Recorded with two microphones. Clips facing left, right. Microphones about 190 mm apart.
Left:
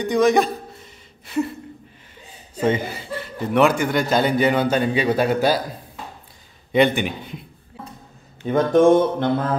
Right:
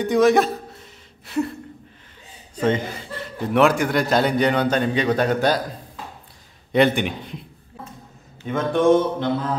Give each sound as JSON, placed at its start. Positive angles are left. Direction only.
{"t": 0.0, "sound": "a man's voice", "side_deg": 0}
{"t": 1.2, "sound": "a sound", "side_deg": 0}
{"t": 2.6, "sound": "a man's voice", "side_deg": 10}
{"t": 6.7, "sound": "a man's voice", "side_deg": 0}
{"t": 8.5, "sound": "speech", "side_deg": 40}